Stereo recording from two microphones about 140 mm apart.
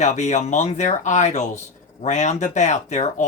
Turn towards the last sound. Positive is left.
turn(degrees=55)  # may be behind; listen again after turning